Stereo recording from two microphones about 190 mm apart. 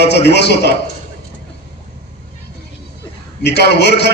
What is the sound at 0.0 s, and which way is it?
Speech, 60° left (ahead or behind).